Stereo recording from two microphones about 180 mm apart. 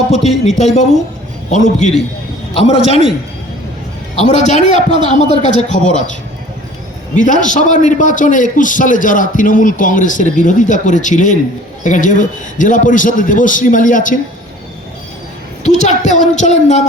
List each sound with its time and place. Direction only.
0.1 s a woman's voice: 35° left (ahead or behind)
4.2 s a woman's voice: 40° left (ahead or behind)
7.2 s a man's voice: 45° left (ahead or behind)
15.6 s a woman's voice: 40° left (ahead or behind)